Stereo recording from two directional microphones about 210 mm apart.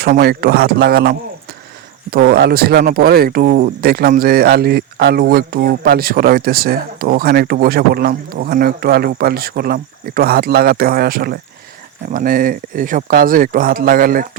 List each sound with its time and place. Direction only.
0.0 s speech: 45° right (ahead or behind)